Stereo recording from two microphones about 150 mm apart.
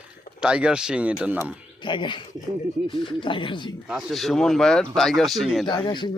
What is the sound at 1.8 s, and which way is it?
Speech, 30° left (ahead or behind).